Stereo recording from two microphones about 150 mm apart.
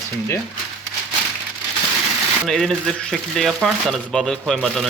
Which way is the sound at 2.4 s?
5° left (ahead or behind).